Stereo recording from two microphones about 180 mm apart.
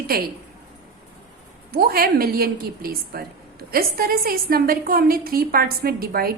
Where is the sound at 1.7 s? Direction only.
55° right (ahead or behind).